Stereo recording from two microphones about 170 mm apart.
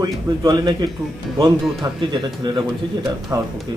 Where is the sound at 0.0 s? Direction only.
25° right (ahead or behind).